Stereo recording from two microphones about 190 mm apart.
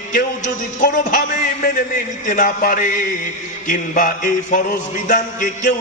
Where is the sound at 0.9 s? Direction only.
40° left (ahead or behind).